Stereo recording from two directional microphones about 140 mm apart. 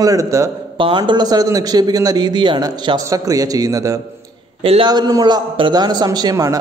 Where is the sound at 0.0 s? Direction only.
25° right (ahead or behind).